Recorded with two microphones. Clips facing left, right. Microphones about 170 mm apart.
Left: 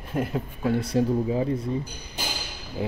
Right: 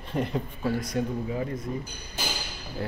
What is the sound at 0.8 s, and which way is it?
Speech, 30° left (ahead or behind).